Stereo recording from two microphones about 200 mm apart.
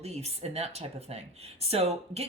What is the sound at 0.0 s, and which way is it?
Speech, 30° right (ahead or behind).